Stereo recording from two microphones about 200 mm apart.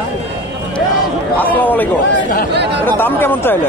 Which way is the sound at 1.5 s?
10° left (ahead or behind).